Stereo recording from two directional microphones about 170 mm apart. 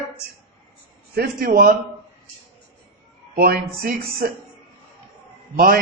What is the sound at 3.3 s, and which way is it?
Speech, 60° right (ahead or behind).